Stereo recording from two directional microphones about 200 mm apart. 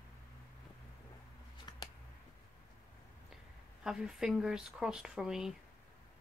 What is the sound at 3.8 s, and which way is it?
Speech, 5° right (ahead or behind).